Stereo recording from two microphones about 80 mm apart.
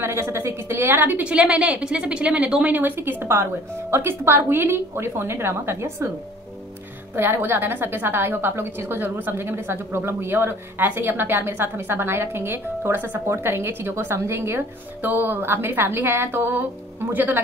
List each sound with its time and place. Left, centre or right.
0.0 s a woman's voice: right
1.2 s a woman's voice: centre; by 6.0 s right
7.2 s a woman's voice: right